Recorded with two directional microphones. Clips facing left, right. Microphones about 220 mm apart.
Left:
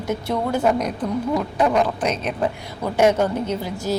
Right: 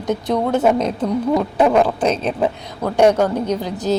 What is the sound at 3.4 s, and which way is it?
Speech, 15° right (ahead or behind).